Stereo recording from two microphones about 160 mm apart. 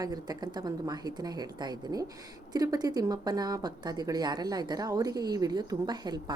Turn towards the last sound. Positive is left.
turn(degrees=-25)  # may be behind; listen again after turning